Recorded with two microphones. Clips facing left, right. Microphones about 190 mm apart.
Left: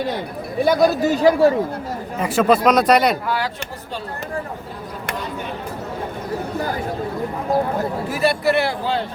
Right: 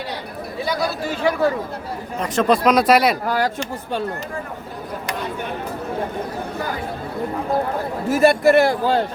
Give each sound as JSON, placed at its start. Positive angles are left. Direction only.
{"t": 0.6, "sound": "speech", "side_deg": 50}
{"t": 2.1, "sound": "speech", "side_deg": 5}
{"t": 3.2, "sound": "a man's voice", "side_deg": -45}
{"t": 8.1, "sound": "a man's voice", "side_deg": -45}